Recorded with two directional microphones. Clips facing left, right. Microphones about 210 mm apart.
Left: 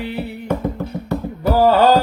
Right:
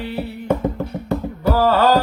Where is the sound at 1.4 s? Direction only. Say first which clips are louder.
Left 3 dB; 15° left (ahead or behind).